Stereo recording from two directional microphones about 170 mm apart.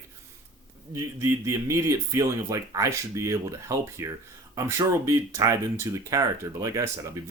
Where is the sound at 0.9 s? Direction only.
20° right (ahead or behind).